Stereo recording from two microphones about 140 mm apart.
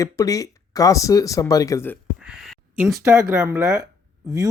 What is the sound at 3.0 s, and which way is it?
Speech, 20° right (ahead or behind).